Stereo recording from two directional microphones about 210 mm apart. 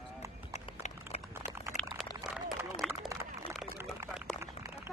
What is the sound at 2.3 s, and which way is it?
Run, 5° right (ahead or behind).